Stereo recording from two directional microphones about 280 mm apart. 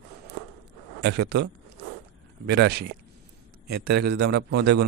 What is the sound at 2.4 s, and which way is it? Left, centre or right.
Speech, right.